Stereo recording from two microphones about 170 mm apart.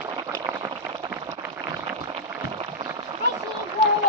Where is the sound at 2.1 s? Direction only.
30° right (ahead or behind).